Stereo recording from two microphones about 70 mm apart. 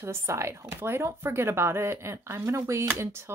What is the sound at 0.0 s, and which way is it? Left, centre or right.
Speech, right.